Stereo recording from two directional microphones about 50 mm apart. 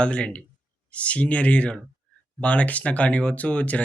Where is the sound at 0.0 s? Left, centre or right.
Left.